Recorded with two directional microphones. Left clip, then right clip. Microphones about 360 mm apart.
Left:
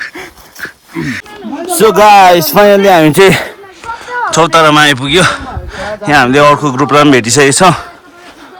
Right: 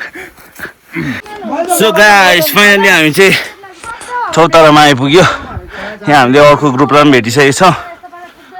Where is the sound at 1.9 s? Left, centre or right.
Centre.